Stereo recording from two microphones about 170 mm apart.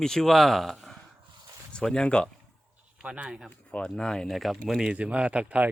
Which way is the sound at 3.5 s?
5° left (ahead or behind).